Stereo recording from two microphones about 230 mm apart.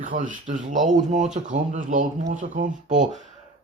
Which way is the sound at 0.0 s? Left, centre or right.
Right.